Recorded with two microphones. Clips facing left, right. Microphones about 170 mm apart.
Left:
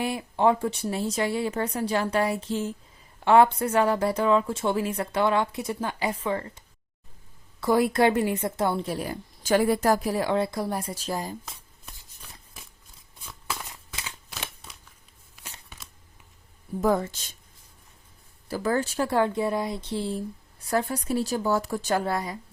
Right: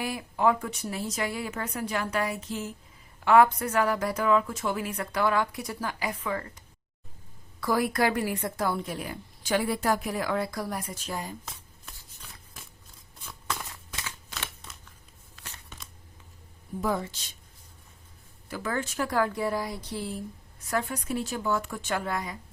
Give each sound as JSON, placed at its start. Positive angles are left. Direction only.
{"t": 0.0, "sound": "a woman's voice", "side_deg": 25}
{"t": 7.6, "sound": "a woman's voice", "side_deg": 25}
{"t": 13.2, "sound": "a sound", "side_deg": 0}
{"t": 15.4, "sound": "tearing", "side_deg": 10}
{"t": 16.8, "sound": "speech", "side_deg": 45}
{"t": 18.4, "sound": "speech", "side_deg": 35}